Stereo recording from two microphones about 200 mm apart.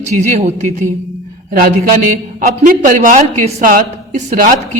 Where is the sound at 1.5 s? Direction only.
45° right (ahead or behind).